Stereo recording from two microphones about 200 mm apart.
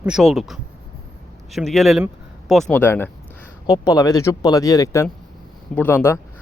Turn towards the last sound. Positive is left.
turn(degrees=10)  # may be behind; listen again after turning